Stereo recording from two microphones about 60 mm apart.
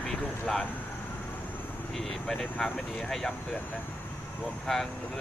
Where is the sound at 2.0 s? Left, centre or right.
Centre.